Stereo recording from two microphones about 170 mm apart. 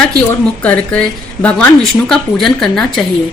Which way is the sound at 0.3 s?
10° left (ahead or behind).